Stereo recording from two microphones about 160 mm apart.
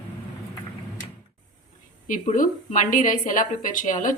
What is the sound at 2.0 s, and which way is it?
A woman's voice, 55° left (ahead or behind).